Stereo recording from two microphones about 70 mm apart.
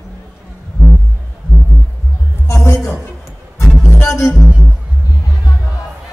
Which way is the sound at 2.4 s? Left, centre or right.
Left.